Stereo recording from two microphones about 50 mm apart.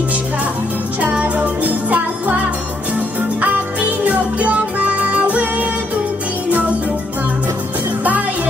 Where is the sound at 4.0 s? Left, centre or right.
Right.